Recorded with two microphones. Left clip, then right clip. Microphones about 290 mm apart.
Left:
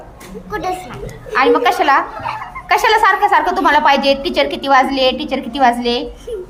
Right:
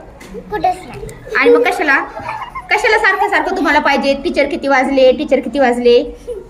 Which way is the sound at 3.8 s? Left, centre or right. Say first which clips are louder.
Left 1 dB; left.